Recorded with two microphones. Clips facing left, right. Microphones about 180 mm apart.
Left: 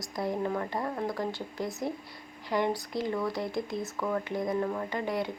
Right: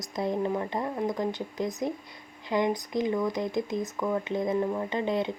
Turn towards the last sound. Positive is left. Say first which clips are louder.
# right 3 dB
turn(degrees=-20)  # may be behind; listen again after turning